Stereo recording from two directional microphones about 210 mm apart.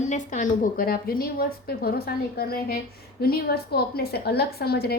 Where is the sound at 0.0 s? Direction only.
35° left (ahead or behind).